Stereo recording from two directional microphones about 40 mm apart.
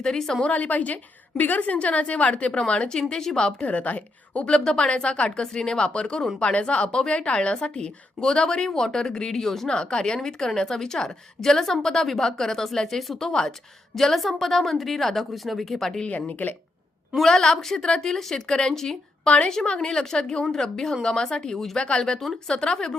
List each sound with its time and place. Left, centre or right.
0.0 s a woman's voice: centre
0.4 s a woman's voice: left
3.0 s a woman's voice: centre
3.7 s a woman's voice: left
4.6 s a woman's voice: left; by 9.6 s centre
9.6 s a woman's voice: left
16.0 s a woman's voice: left
17.2 s a woman's voice: centre